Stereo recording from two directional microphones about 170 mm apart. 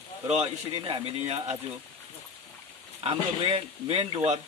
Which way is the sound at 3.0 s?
35° right (ahead or behind).